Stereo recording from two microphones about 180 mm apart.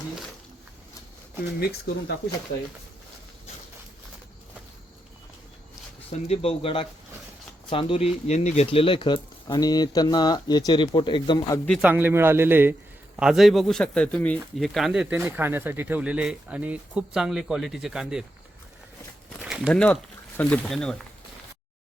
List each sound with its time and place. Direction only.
1.5 s speech: 60° left (ahead or behind)
6.1 s speech: 35° left (ahead or behind)
11.8 s a man's voice: 10° right (ahead or behind)
19.4 s a sound: 5° right (ahead or behind)
19.7 s speech: 5° left (ahead or behind)